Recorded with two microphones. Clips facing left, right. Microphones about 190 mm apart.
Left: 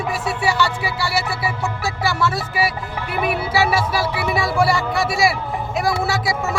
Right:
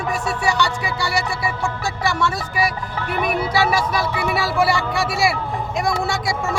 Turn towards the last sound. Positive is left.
turn(degrees=5)  # may be behind; listen again after turning